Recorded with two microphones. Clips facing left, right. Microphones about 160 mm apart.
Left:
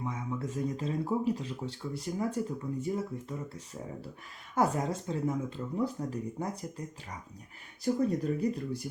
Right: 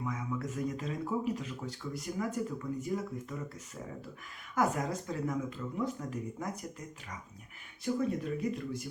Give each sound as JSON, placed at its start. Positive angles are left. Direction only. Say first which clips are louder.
{"t": 0.0, "sound": "speech", "louder": "left 1 dB", "side_deg": 30}
{"t": 4.5, "sound": "speech", "louder": "left 2 dB", "side_deg": 30}
{"t": 7.9, "sound": "speech", "louder": "left 2 dB", "side_deg": 35}